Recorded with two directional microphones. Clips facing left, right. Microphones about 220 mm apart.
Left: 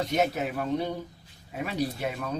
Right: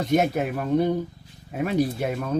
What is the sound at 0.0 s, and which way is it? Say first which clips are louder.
Speech: right 5 dB; 50° right (ahead or behind).